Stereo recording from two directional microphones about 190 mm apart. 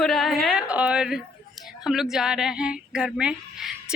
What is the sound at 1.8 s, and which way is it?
Speech, centre (ahead or behind).